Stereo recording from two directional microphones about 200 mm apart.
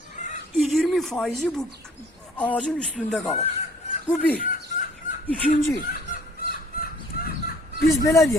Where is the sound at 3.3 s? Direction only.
30° left (ahead or behind).